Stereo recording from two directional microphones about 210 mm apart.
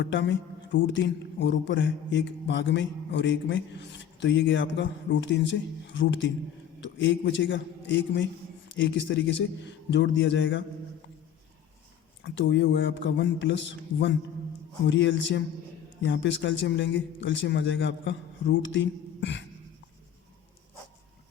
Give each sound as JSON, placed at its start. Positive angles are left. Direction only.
{"t": 0.0, "sound": "speech", "side_deg": 60}
{"t": 12.2, "sound": "speech", "side_deg": 60}